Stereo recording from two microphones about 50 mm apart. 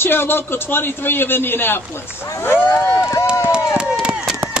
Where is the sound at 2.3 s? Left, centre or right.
Left.